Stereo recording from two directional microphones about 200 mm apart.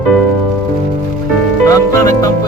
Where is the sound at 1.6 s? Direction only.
15° left (ahead or behind).